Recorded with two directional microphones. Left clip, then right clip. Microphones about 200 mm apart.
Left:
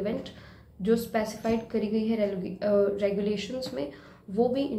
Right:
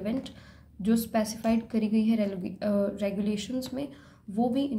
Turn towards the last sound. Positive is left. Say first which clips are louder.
# left 3 dB
turn(degrees=-35)  # may be behind; listen again after turning